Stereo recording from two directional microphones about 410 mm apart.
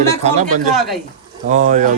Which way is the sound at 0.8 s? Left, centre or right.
Centre.